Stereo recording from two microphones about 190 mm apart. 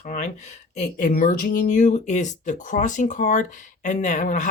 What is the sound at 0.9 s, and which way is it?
Speech, 45° left (ahead or behind).